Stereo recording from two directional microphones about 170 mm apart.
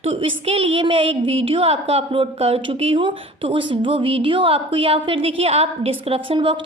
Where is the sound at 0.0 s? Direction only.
35° right (ahead or behind).